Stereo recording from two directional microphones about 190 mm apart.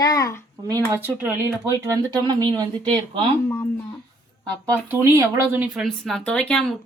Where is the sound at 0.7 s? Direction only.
15° right (ahead or behind).